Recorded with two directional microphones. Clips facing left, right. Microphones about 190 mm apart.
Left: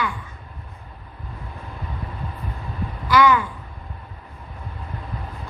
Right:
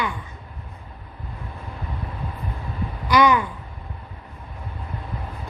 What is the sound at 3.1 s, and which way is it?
Babbling, 20° right (ahead or behind).